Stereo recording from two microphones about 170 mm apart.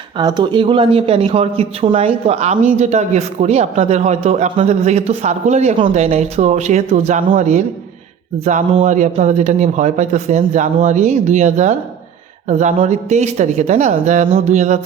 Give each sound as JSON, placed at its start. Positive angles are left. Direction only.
{"t": 0.2, "sound": "speech", "side_deg": -25}